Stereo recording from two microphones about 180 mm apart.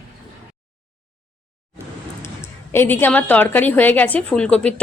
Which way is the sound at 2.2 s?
15° left (ahead or behind).